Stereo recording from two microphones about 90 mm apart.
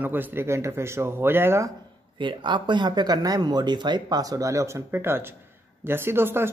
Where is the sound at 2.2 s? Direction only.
60° right (ahead or behind).